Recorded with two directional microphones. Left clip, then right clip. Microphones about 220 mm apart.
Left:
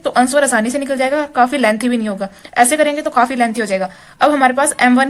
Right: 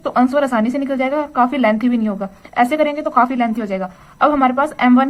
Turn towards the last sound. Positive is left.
turn(degrees=20)  # may be behind; listen again after turning